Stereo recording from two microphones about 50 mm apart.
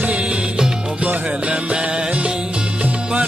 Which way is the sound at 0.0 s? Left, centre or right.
Right.